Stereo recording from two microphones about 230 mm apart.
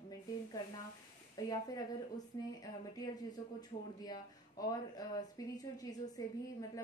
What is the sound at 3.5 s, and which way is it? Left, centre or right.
Speech, centre.